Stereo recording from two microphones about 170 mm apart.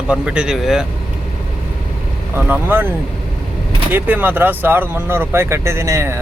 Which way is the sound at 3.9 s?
10° right (ahead or behind).